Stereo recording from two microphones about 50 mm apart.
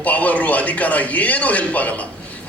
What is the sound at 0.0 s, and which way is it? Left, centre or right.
Speech, left.